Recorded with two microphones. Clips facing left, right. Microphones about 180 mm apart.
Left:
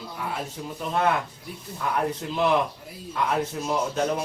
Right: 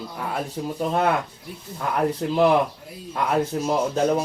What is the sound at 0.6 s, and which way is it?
Speech, 30° right (ahead or behind).